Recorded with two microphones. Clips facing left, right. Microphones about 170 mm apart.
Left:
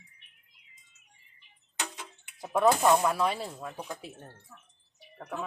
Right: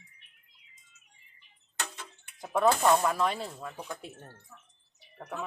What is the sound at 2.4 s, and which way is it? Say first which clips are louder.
Speech: left 1 dB; 5° left (ahead or behind).